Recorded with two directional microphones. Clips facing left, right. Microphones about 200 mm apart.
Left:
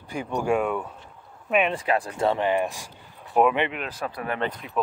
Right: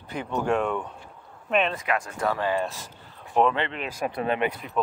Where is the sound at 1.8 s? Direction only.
30° left (ahead or behind); by 3.7 s 15° left (ahead or behind).